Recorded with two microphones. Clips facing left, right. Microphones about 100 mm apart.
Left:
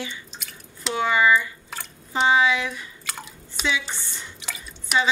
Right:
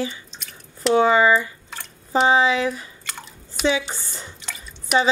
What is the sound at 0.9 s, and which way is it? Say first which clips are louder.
Speech: right 4 dB; 35° right (ahead or behind).